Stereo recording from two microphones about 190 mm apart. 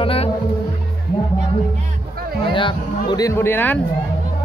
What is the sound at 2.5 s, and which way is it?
Speech, 25° left (ahead or behind).